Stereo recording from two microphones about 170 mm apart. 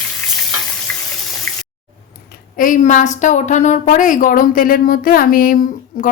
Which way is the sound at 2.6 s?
50° left (ahead or behind).